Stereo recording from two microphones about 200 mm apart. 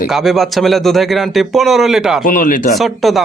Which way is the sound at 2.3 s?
40° left (ahead or behind).